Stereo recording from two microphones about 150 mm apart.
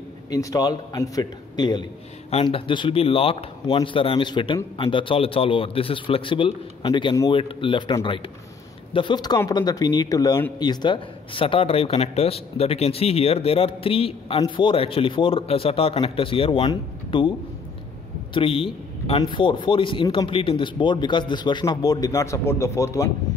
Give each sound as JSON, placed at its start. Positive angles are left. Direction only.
{"t": 0.3, "sound": "a man's voice", "side_deg": 25}
{"t": 18.3, "sound": "speech", "side_deg": 40}